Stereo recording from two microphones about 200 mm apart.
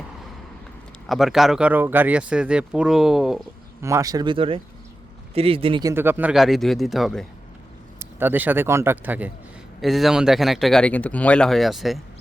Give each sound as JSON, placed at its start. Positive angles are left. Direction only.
{"t": 1.0, "sound": "speech", "side_deg": 0}
{"t": 3.8, "sound": "speech", "side_deg": -15}
{"t": 5.9, "sound": "speech", "side_deg": -10}
{"t": 7.9, "sound": "speech", "side_deg": -10}